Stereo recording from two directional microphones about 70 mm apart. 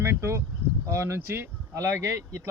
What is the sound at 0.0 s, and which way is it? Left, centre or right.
Speech, right.